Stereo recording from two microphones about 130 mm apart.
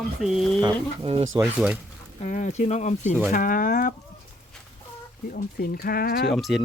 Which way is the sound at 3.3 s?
90° left.